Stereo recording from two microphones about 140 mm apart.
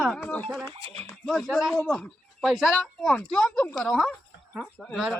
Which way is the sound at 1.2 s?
Centre (ahead or behind).